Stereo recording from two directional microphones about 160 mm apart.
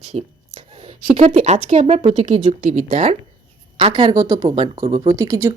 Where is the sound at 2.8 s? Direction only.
35° right (ahead or behind).